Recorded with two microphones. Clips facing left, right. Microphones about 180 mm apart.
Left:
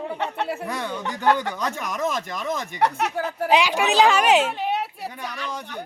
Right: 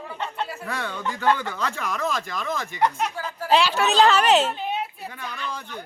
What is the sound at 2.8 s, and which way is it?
Speech, 70° left (ahead or behind).